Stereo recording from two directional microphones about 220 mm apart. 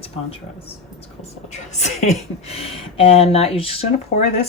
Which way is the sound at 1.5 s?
30° left (ahead or behind).